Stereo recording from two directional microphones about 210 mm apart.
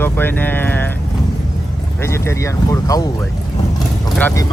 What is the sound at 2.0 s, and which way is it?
Speech, 10° left (ahead or behind).